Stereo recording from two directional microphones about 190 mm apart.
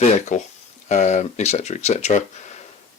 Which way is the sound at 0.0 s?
35° left (ahead or behind).